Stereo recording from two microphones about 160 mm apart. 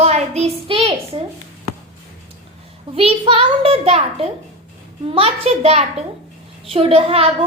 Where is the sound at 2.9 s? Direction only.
35° right (ahead or behind).